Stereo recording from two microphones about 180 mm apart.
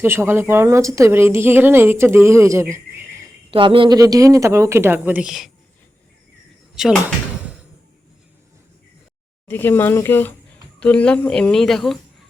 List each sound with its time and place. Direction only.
0.0 s speech: 15° right (ahead or behind)
3.5 s speech: 30° right (ahead or behind); by 5.5 s 5° right (ahead or behind)
6.8 s a woman's voice: 5° right (ahead or behind)
9.5 s a woman's voice: 10° left (ahead or behind)